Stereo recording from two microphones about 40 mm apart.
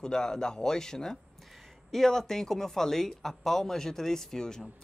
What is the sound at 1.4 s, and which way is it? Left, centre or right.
Speech, centre.